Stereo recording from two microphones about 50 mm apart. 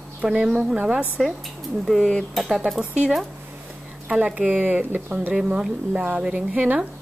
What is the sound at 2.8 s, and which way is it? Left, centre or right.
Speech, right.